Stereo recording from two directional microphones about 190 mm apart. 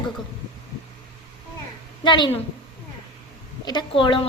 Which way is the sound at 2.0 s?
25° left (ahead or behind).